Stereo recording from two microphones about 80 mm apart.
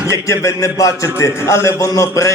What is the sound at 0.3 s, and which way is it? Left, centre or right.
A man's voice, left.